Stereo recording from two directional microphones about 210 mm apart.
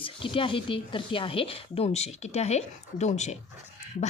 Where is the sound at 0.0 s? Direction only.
25° left (ahead or behind).